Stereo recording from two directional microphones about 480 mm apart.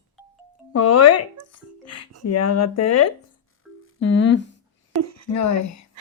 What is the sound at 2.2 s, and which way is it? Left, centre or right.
Speech, left.